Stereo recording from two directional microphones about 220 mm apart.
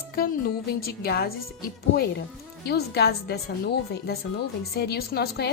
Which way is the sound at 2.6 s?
45° left (ahead or behind).